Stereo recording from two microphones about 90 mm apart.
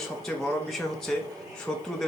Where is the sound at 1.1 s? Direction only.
5° left (ahead or behind).